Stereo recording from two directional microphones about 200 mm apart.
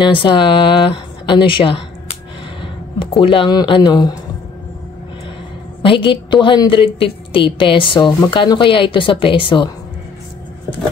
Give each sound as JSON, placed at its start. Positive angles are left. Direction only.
{"t": 0.0, "sound": "a woman's voice", "side_deg": 25}
{"t": 5.8, "sound": "a woman's voice", "side_deg": 25}